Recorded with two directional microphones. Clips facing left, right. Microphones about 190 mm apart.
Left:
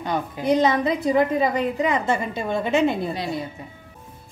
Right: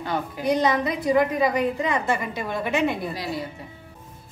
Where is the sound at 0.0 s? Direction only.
20° left (ahead or behind).